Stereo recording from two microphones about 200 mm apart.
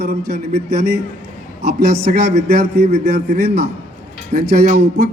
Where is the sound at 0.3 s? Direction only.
50° right (ahead or behind).